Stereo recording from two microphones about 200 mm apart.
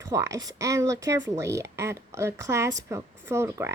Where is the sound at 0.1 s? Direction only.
15° right (ahead or behind).